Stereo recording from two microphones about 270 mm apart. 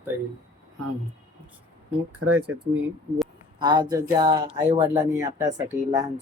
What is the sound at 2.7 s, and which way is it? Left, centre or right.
Speech, centre.